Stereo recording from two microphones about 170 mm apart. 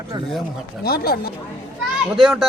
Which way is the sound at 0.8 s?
65° left (ahead or behind).